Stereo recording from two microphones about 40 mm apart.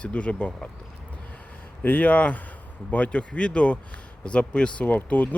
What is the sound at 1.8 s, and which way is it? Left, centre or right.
Speech, left.